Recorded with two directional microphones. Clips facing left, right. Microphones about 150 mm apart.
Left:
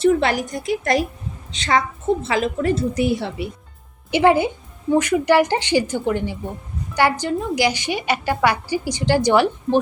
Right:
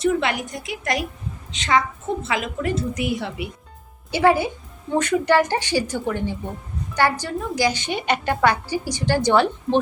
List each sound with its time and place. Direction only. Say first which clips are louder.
0.0 s a woman's voice: left 4 dB; 35° left (ahead or behind)
4.1 s a woman's voice: left 2 dB; 20° left (ahead or behind)